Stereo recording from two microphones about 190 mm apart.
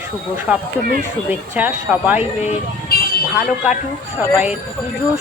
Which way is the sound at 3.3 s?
5° right (ahead or behind).